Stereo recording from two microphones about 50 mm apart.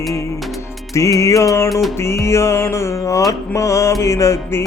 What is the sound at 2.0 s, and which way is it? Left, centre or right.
Music, left.